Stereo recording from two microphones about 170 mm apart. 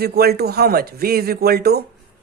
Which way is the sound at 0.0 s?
70° right (ahead or behind).